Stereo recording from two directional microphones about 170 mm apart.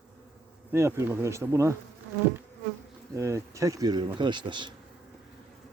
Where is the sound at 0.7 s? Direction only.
15° right (ahead or behind).